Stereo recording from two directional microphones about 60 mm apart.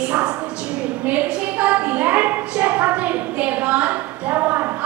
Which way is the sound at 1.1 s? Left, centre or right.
Right.